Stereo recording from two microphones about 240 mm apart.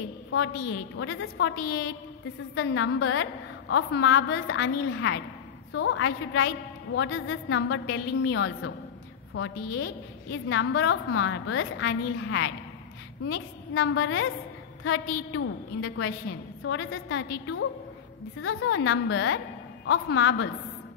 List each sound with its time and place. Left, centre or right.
0.9 s a woman's voice: left
2.5 s a woman's voice: left